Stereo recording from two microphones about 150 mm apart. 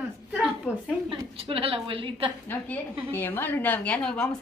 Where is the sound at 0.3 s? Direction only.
5° right (ahead or behind).